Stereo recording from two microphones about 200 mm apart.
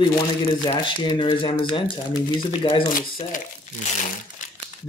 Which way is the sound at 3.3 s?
40° left (ahead or behind).